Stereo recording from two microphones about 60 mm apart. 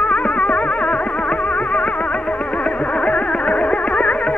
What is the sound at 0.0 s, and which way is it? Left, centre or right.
Music, centre.